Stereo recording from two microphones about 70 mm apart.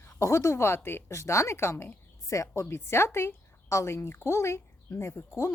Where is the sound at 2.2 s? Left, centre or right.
Left.